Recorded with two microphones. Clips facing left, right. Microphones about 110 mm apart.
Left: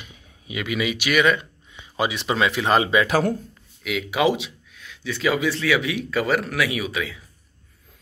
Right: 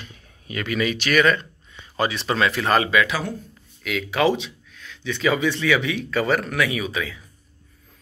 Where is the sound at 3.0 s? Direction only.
45° left (ahead or behind).